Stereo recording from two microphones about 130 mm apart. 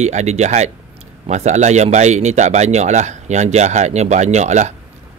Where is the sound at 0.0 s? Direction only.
60° right (ahead or behind).